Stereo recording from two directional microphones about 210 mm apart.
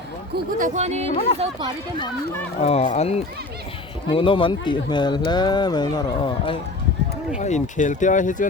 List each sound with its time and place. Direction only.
0.3 s speech: 35° right (ahead or behind)
1.4 s speech: 20° right (ahead or behind)
2.6 s speech: 30° left (ahead or behind)
7.3 s speech: 35° left (ahead or behind)